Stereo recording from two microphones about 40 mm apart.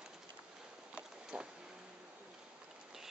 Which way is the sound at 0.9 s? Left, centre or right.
Right.